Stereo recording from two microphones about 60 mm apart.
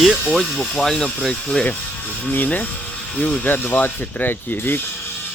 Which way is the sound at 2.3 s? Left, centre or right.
Left.